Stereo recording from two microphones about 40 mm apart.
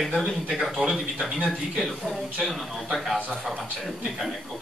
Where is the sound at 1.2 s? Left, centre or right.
Centre.